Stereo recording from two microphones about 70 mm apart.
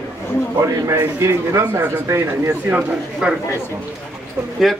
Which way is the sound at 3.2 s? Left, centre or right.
Centre.